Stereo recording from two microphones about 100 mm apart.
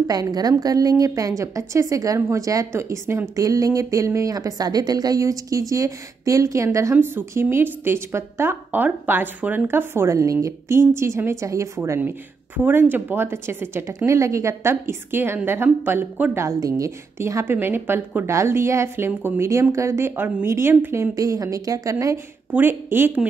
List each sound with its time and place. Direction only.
0.0 s a woman's voice: 40° right (ahead or behind)
12.0 s a woman's voice: 20° right (ahead or behind)
16.4 s a woman's voice: 35° right (ahead or behind)
22.5 s a woman's voice: 20° right (ahead or behind)